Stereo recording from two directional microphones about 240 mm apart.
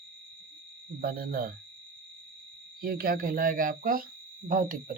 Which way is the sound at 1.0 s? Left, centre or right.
Right.